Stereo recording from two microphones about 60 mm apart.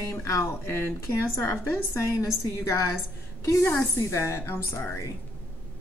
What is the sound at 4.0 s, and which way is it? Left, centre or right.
Speech, left.